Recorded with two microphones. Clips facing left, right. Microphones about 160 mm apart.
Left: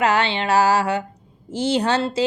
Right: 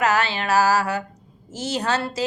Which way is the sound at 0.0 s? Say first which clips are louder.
Left 2 dB; 30° left (ahead or behind).